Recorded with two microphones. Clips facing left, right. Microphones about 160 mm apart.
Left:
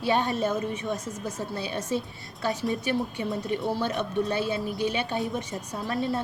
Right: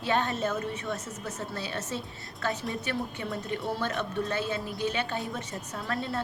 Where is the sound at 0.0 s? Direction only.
15° left (ahead or behind).